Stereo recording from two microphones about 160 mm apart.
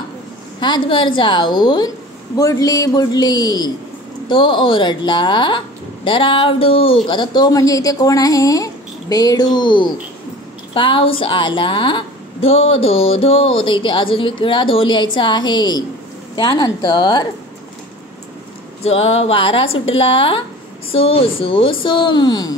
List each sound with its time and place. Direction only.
0.6 s a woman's voice: 30° left (ahead or behind)
18.9 s a woman's voice: 40° left (ahead or behind)